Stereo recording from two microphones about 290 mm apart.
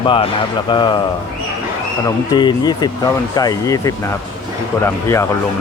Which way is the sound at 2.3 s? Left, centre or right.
Centre.